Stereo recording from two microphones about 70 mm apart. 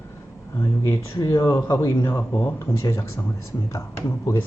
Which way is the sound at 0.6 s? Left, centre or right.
Left.